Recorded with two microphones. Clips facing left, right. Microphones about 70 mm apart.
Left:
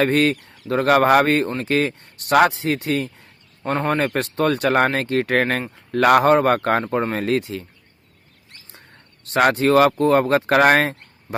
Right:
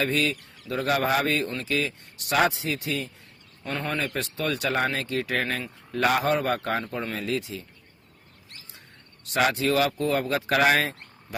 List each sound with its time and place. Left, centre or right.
0.0 s speech: left
3.6 s speech: left
9.3 s speech: left